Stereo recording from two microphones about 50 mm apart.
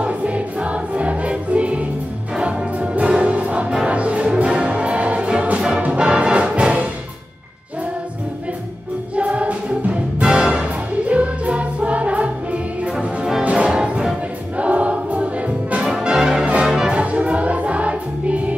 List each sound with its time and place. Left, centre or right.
0.0 s music: right
9.1 s music: right
12.8 s music: centre
13.4 s music: right
16.9 s music: right